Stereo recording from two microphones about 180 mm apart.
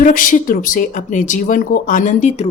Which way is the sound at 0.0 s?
50° left (ahead or behind).